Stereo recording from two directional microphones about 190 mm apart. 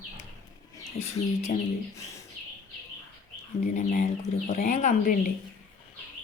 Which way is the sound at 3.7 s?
40° left (ahead or behind).